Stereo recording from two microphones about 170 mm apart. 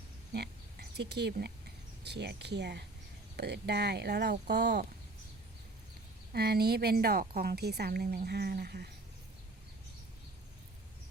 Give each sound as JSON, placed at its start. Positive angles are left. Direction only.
{"t": 0.3, "sound": "a sound", "side_deg": -75}
{"t": 2.0, "sound": "a woman's voice", "side_deg": -85}
{"t": 6.3, "sound": "a woman's voice", "side_deg": -70}